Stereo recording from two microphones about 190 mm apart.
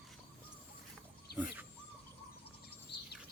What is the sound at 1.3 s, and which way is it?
Bird, 55° left (ahead or behind).